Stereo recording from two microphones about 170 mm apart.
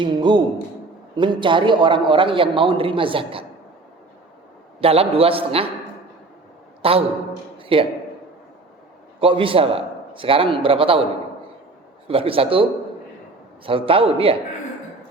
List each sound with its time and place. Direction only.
0.0 s a man's voice: 25° right (ahead or behind)
4.8 s a man's voice: 35° right (ahead or behind)
6.8 s a man's voice: 35° right (ahead or behind)
7.6 s a sound: 30° right (ahead or behind)
9.2 s a man's voice: 30° right (ahead or behind)
12.0 s a man's voice: 35° right (ahead or behind)
13.7 s a man's voice: 30° right (ahead or behind)